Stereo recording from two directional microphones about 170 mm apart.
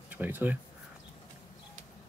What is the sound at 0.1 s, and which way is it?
Speech, 10° right (ahead or behind).